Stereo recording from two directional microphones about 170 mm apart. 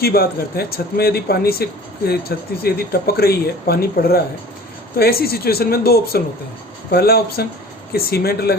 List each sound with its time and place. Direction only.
0.0 s speech: 65° left (ahead or behind)